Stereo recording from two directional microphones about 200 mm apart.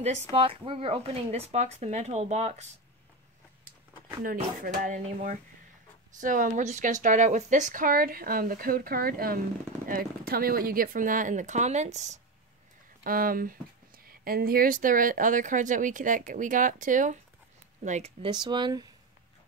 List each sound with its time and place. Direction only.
0.0 s speech: 30° right (ahead or behind)
4.2 s speech: 45° right (ahead or behind)
13.0 s speech: 45° right (ahead or behind); by 18.9 s 20° right (ahead or behind)